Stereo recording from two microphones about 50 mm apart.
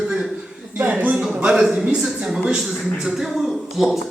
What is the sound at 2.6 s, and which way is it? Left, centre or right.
Speech, centre.